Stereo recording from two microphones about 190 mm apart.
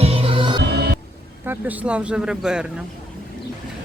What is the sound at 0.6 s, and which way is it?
Music, 55° right (ahead or behind).